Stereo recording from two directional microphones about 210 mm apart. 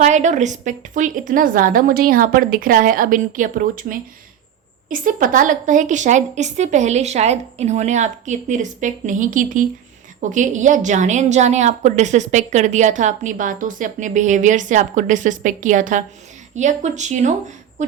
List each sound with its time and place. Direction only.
0.0 s a woman's voice: 35° right (ahead or behind)